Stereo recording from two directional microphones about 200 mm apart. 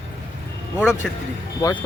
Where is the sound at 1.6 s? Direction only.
10° left (ahead or behind).